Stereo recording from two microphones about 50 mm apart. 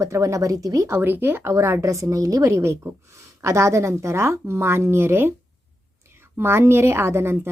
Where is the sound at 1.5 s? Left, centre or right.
Right.